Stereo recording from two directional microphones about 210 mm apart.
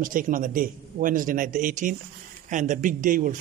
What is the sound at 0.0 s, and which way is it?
A man's voice, 40° right (ahead or behind).